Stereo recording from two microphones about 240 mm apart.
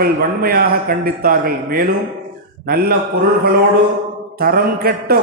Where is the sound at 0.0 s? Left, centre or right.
Right.